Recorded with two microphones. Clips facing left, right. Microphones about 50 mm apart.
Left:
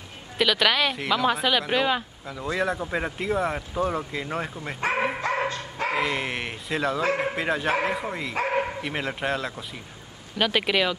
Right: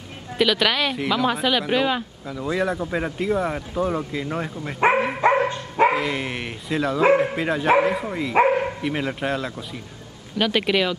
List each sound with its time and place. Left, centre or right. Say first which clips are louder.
0.4 s speech: right 2 dB; centre
4.7 s speech: right 6 dB; right
5.9 s speech: right 1 dB; centre